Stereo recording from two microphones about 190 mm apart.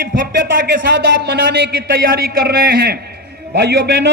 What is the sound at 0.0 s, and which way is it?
A man's voice, 50° right (ahead or behind).